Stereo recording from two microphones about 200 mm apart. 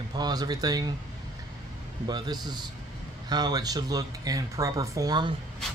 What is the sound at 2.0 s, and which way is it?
Speech, 20° right (ahead or behind).